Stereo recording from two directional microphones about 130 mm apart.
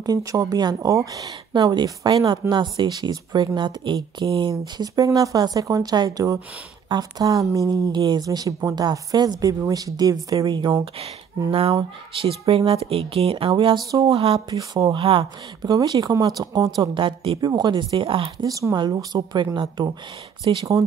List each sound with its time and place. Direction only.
0.0 s speech: 25° right (ahead or behind)
12.2 s speech: 45° right (ahead or behind)
14.5 s speech: 30° right (ahead or behind)
15.7 s speech: 30° right (ahead or behind)
18.5 s speech: 30° right (ahead or behind)